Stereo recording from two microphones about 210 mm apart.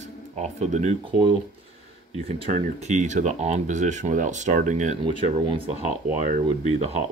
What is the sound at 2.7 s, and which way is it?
Speech, 35° right (ahead or behind).